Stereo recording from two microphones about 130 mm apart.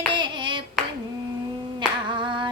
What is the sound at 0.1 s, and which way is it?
Hands, 40° right (ahead or behind).